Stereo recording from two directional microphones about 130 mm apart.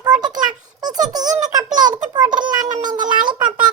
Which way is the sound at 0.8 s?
30° right (ahead or behind).